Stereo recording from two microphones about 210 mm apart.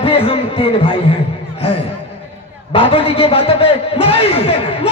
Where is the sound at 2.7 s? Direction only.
25° left (ahead or behind).